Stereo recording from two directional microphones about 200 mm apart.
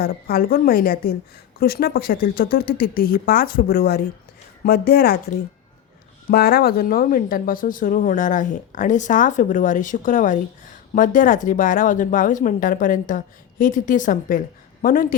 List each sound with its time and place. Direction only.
0.0 s speech: 50° left (ahead or behind)
6.3 s speech: 50° left (ahead or behind)